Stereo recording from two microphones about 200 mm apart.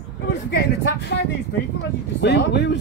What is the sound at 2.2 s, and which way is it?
Speech, 60° left (ahead or behind).